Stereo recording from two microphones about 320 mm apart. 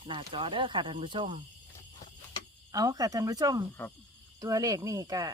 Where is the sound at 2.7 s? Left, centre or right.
Centre.